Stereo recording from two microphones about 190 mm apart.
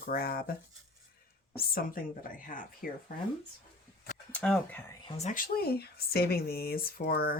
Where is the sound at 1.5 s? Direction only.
50° left (ahead or behind).